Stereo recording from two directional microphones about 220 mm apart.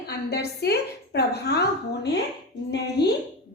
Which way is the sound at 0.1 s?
45° left (ahead or behind).